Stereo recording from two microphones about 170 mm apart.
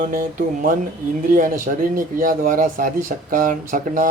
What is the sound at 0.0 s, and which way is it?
Speech, 55° right (ahead or behind).